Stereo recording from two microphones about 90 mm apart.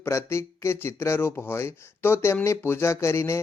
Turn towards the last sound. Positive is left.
turn(degrees=30)  # may be behind; listen again after turning